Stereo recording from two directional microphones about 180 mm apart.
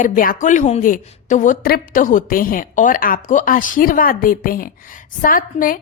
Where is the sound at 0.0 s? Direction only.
50° left (ahead or behind).